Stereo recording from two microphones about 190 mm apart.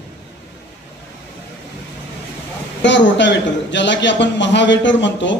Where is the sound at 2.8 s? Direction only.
70° left (ahead or behind).